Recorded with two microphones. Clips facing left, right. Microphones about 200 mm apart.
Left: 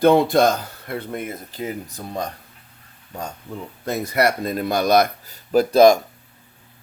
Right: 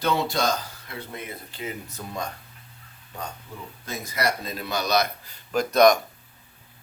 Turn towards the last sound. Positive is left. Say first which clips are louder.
# left 5 dB
turn(degrees=30)  # may be behind; listen again after turning